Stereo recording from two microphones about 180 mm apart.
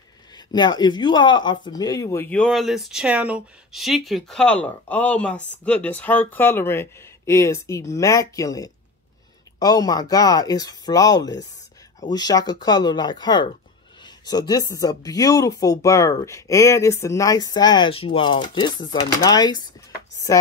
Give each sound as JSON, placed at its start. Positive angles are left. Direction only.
{"t": 0.5, "sound": "speech", "side_deg": 25}